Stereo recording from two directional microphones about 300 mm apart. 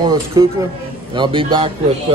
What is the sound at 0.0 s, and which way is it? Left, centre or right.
Speech, centre.